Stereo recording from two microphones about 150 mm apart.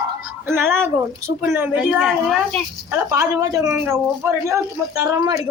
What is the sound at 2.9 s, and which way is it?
A woman's voice, 15° right (ahead or behind).